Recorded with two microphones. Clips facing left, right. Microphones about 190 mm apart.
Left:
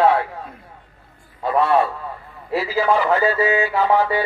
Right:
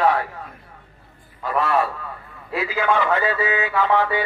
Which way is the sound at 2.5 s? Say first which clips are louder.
Left 2 dB; 35° left (ahead or behind).